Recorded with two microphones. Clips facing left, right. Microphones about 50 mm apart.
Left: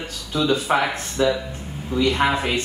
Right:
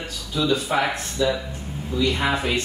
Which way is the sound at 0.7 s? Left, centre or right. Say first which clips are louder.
Left 2 dB; left.